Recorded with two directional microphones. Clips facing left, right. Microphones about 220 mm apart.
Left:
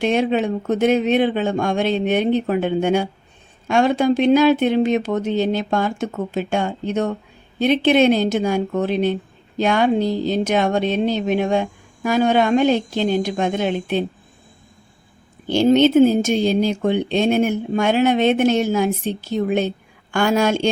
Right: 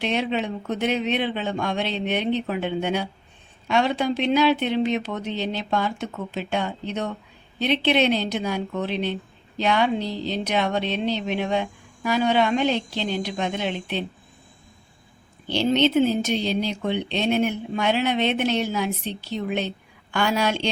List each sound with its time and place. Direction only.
0.0 s speech: 45° left (ahead or behind)
15.4 s speech: 50° left (ahead or behind)